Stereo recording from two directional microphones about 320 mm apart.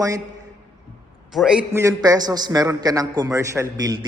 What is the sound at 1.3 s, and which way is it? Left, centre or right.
A man's voice, centre.